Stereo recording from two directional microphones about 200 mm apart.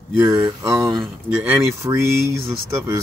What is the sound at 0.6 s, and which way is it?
Speech, 15° right (ahead or behind).